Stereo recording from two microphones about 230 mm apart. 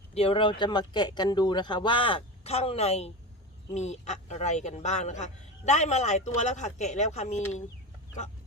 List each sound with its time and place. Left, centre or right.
0.1 s speech: left